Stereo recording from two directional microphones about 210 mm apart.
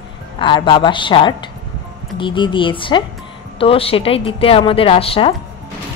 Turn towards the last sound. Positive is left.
turn(degrees=25)  # may be behind; listen again after turning